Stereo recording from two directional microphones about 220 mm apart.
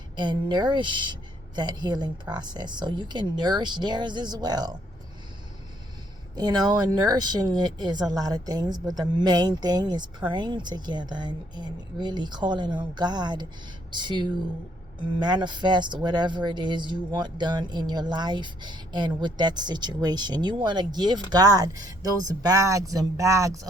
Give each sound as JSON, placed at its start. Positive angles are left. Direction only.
{"t": 0.2, "sound": "speech", "side_deg": -20}
{"t": 6.3, "sound": "speech", "side_deg": -20}